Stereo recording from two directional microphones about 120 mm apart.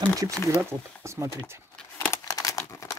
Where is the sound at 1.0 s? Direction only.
25° right (ahead or behind).